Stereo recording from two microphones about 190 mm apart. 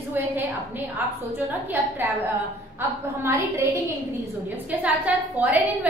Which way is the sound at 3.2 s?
15° right (ahead or behind).